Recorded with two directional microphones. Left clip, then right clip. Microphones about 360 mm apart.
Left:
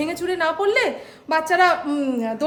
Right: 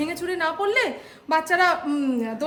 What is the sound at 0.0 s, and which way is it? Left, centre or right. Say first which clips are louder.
A woman's voice: left 3 dB; centre.